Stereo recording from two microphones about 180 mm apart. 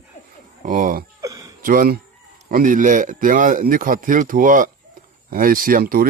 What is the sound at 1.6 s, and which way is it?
Speech, 50° right (ahead or behind).